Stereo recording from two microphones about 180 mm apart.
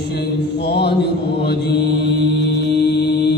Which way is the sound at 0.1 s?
65° left (ahead or behind).